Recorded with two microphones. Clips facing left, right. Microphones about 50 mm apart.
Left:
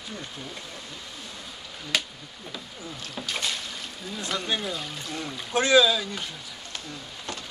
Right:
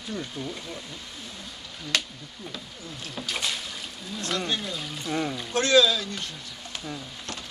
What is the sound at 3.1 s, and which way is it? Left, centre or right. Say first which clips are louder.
Speech: even; centre.